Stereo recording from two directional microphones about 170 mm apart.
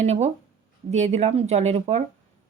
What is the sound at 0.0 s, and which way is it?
A woman's voice, 40° right (ahead or behind).